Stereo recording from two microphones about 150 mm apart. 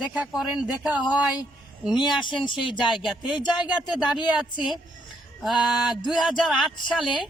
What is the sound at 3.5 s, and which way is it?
Speech, 5° right (ahead or behind).